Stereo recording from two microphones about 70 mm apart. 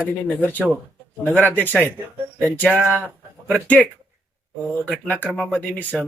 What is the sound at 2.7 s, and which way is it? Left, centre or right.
Speech, right.